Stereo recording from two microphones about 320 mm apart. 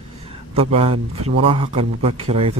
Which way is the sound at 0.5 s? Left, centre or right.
Centre.